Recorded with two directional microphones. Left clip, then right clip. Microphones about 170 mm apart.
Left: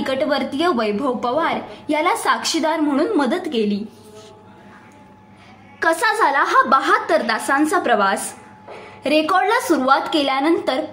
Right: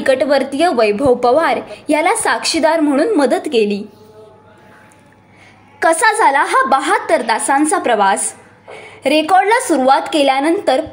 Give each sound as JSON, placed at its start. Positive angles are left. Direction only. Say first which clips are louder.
{"t": 0.0, "sound": "a woman's voice", "louder": "right 7 dB", "side_deg": -20}
{"t": 5.8, "sound": "a woman's voice", "louder": "right 5 dB", "side_deg": -20}